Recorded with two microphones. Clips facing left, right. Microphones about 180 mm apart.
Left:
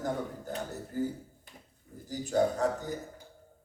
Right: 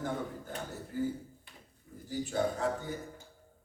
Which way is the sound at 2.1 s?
40° left (ahead or behind).